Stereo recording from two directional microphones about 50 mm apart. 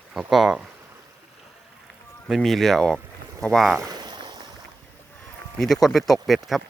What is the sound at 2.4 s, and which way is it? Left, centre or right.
Speech, centre.